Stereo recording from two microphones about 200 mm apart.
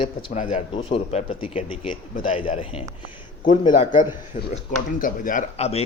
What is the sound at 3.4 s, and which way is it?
Speech, 40° left (ahead or behind).